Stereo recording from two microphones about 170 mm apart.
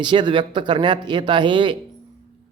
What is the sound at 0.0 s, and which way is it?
Speech, 25° right (ahead or behind).